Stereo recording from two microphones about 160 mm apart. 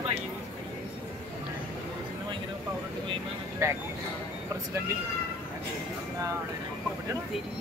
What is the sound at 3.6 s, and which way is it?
Speech, 20° right (ahead or behind).